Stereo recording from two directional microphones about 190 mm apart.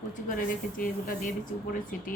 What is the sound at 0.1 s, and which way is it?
A woman's voice, 50° left (ahead or behind).